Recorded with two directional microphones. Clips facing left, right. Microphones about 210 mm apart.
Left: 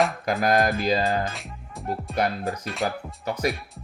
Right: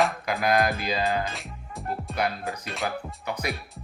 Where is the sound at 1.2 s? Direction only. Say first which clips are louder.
Left 2 dB; centre (ahead or behind).